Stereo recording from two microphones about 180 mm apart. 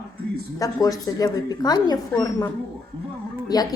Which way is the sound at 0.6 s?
20° left (ahead or behind).